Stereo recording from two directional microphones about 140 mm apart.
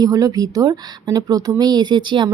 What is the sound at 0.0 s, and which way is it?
Speech, 25° right (ahead or behind).